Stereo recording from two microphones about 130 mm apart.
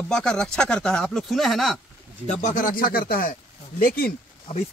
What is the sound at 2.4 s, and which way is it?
Speech, 90° left.